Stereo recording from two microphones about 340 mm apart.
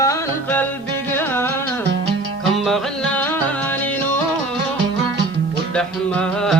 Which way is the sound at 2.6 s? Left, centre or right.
Centre.